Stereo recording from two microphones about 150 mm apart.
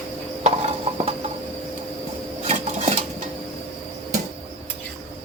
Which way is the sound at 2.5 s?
50° right (ahead or behind).